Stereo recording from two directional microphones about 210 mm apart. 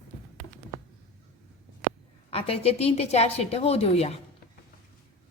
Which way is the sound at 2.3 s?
30° left (ahead or behind).